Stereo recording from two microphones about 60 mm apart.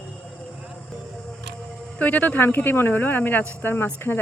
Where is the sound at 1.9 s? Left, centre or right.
Left.